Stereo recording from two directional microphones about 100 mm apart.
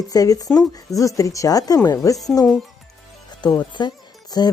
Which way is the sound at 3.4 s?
45° left (ahead or behind).